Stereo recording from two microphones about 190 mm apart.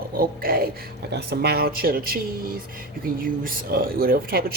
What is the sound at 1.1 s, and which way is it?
Speech, 60° right (ahead or behind).